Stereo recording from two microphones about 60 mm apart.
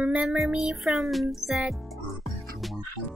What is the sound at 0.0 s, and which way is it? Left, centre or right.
Speech, centre.